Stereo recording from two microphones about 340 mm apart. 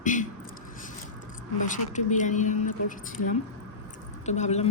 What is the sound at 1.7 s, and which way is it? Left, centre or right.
A woman's voice, left.